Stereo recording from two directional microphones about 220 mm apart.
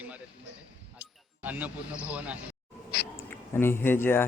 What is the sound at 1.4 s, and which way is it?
Speech, 10° right (ahead or behind).